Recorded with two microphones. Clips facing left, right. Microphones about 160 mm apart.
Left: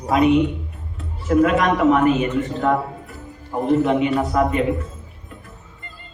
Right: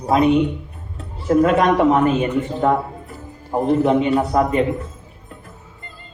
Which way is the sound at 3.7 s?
35° right (ahead or behind).